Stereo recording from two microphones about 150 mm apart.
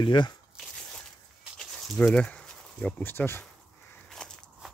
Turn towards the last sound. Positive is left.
turn(degrees=5)  # may be behind; listen again after turning